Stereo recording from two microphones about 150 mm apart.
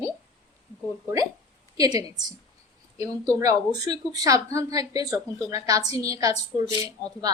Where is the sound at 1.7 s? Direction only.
25° right (ahead or behind).